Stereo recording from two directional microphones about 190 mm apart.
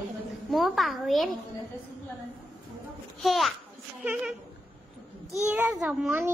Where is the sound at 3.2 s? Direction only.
Centre (ahead or behind).